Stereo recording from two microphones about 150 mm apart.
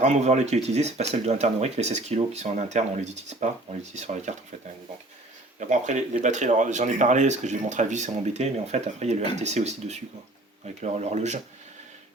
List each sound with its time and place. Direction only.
0.0 s speech: 50° right (ahead or behind)
5.5 s speech: 50° right (ahead or behind)